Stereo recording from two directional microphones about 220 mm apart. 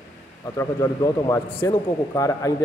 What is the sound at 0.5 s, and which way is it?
Speech, 15° left (ahead or behind).